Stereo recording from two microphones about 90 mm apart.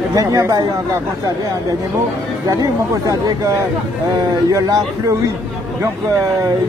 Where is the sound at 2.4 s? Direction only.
40° right (ahead or behind).